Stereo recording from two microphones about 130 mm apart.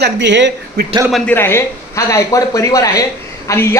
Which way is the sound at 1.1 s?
10° left (ahead or behind).